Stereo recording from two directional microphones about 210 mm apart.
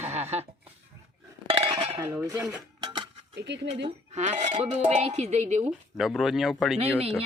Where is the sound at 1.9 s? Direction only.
15° right (ahead or behind).